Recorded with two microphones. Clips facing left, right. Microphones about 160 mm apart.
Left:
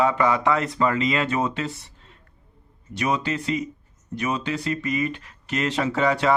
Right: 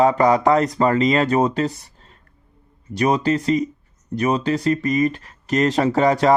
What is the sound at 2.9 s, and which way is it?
Speech, 40° right (ahead or behind).